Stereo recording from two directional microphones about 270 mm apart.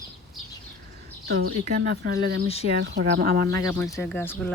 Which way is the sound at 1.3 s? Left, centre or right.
Right.